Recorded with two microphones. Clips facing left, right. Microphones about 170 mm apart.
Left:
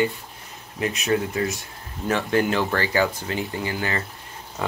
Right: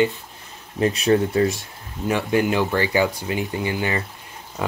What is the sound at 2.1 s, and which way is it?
Speech, 15° right (ahead or behind).